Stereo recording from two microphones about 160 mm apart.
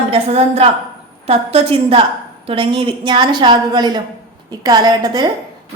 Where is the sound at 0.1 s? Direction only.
40° right (ahead or behind).